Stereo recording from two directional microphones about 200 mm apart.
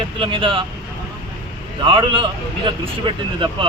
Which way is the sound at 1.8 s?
25° right (ahead or behind).